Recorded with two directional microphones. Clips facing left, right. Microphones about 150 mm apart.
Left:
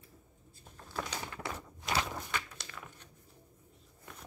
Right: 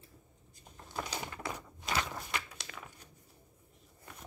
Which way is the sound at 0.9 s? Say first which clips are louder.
Even; 15° right (ahead or behind).